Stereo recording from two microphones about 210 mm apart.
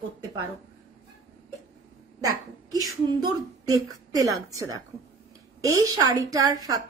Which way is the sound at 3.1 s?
20° right (ahead or behind).